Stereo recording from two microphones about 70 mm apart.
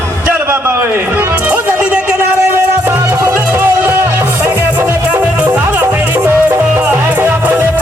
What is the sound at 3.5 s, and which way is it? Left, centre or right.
Music, right.